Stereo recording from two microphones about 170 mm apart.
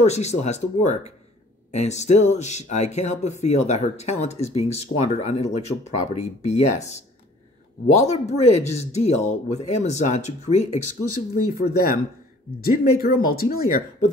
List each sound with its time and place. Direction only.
0.0 s speech: 40° left (ahead or behind)
8.0 s speech: 40° left (ahead or behind)
11.5 s speech: 60° left (ahead or behind)